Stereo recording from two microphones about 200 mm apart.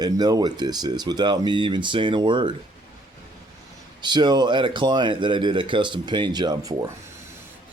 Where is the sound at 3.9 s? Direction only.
20° right (ahead or behind).